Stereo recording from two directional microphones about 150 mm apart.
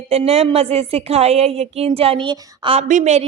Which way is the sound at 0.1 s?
45° right (ahead or behind).